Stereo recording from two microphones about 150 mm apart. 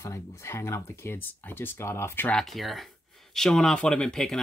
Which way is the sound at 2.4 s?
Centre (ahead or behind).